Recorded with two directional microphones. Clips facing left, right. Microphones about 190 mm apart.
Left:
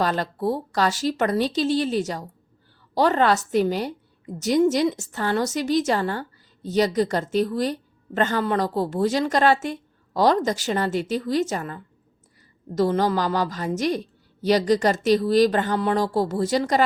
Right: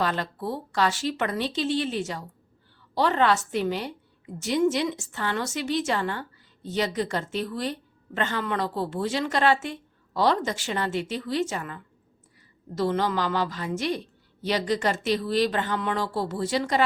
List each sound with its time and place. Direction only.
0.0 s a woman's voice: 40° left (ahead or behind)